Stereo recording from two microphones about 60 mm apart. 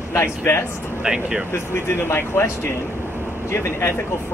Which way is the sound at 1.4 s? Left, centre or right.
Left.